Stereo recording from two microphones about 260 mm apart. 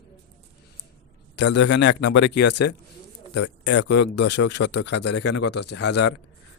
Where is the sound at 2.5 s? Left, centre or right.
Left.